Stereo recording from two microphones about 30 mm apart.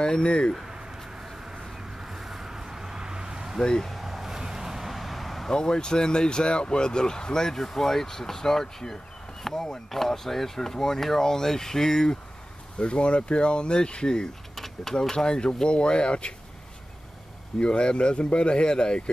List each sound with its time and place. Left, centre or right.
0.0 s speech: left
2.0 s vehicle: centre
4.0 s vehicle: centre
5.5 s speech: left
12.7 s speech: left
14.5 s a sound: centre
15.0 s speech: left
17.6 s speech: left